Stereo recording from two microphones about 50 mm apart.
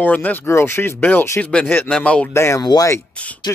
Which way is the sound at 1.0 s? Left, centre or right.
Left.